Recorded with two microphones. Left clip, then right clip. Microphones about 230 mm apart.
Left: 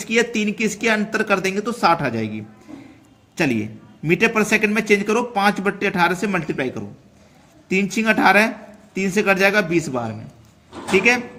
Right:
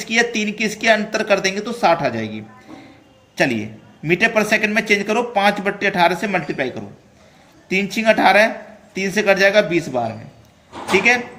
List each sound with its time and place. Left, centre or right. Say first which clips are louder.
0.0 s a man's voice: right 1 dB; left